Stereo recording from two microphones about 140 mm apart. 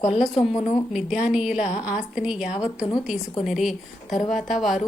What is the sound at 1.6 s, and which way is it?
Speech, 55° left (ahead or behind).